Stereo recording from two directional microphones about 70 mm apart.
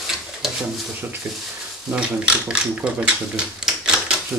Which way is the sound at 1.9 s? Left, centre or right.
Centre.